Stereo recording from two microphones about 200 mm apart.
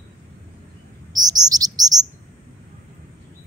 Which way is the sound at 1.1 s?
20° right (ahead or behind).